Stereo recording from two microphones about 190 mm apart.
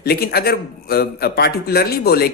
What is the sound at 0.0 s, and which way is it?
A man's voice, 55° left (ahead or behind).